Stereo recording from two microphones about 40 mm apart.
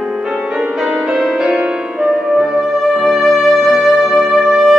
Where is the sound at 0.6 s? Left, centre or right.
Centre.